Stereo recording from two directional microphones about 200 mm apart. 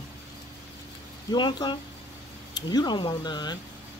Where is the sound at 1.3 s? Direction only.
20° left (ahead or behind).